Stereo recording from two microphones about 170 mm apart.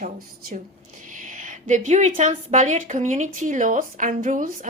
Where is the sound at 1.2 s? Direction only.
50° right (ahead or behind).